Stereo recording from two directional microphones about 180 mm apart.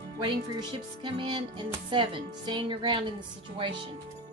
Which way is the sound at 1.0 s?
25° right (ahead or behind).